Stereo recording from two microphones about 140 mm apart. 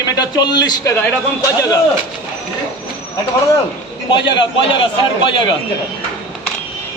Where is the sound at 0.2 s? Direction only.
30° left (ahead or behind).